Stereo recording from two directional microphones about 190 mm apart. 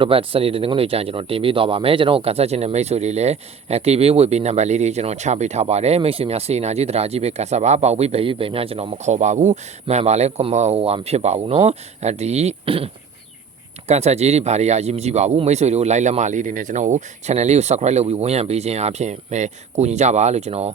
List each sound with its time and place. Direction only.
0.0 s speech: 30° right (ahead or behind)